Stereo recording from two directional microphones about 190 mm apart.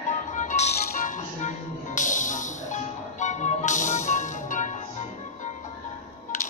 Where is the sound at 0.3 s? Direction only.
40° left (ahead or behind).